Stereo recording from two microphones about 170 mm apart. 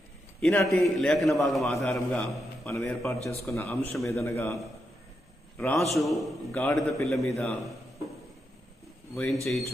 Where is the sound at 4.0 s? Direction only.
15° left (ahead or behind).